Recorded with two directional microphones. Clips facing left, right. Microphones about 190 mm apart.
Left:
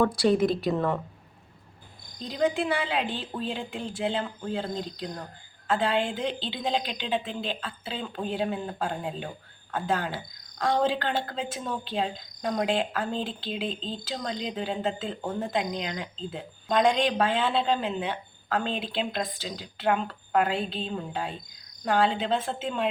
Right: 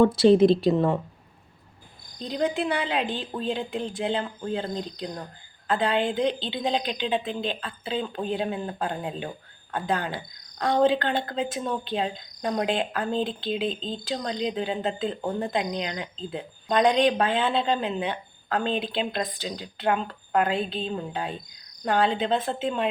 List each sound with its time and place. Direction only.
0.0 s speech: 25° right (ahead or behind)
2.1 s speech: 5° left (ahead or behind)